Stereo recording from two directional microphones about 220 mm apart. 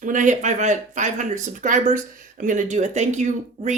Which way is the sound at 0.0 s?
35° right (ahead or behind).